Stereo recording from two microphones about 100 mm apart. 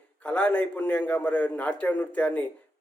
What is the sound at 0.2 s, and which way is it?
A man's voice, 15° left (ahead or behind).